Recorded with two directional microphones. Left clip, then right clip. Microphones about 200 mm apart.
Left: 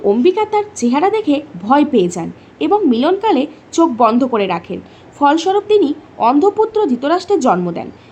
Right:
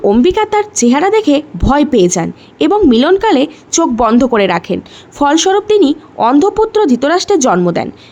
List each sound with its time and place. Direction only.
0.0 s speech: 35° right (ahead or behind)